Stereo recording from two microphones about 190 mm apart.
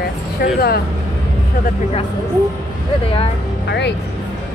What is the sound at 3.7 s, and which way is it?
Speech, 65° left (ahead or behind).